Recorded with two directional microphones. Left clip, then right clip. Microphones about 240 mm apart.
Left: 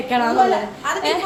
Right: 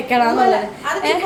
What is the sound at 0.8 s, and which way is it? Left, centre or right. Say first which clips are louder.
Speech: left 1 dB; left.